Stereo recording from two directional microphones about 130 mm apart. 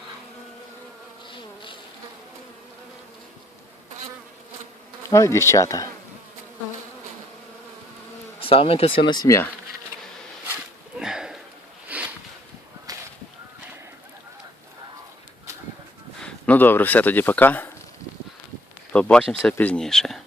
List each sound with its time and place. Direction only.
1.3 s insect: 40° left (ahead or behind)
5.0 s bee: 25° left (ahead or behind)
8.4 s speech: 45° left (ahead or behind)
9.1 s bee: 25° left (ahead or behind)
11.0 s sniff: 5° right (ahead or behind)
11.9 s a sound: 10° right (ahead or behind)
12.9 s whip: 30° right (ahead or behind)
16.2 s speech: 15° left (ahead or behind)
18.9 s speech: 10° left (ahead or behind)